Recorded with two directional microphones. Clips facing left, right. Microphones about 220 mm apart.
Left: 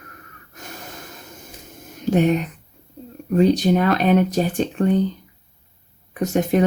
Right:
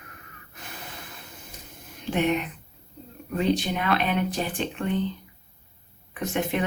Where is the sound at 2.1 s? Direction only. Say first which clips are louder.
Left 6 dB; 40° left (ahead or behind).